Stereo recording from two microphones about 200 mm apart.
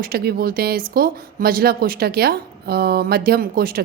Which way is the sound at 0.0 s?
50° right (ahead or behind).